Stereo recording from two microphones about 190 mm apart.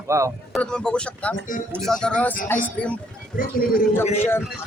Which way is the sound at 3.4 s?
50° left (ahead or behind).